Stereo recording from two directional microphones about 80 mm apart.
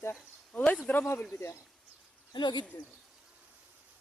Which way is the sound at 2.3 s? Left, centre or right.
Left.